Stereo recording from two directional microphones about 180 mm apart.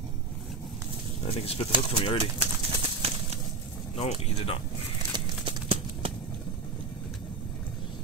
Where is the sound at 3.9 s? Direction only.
35° left (ahead or behind).